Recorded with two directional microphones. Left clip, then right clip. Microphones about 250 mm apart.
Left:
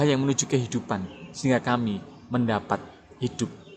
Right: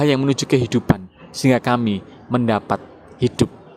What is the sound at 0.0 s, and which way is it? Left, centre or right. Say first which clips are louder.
Speech: right 6 dB; right.